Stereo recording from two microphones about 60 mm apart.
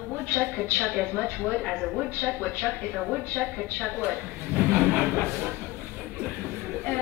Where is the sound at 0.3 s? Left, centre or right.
Left.